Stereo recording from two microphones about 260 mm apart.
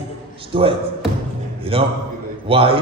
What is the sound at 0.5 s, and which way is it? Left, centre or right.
Speech, right.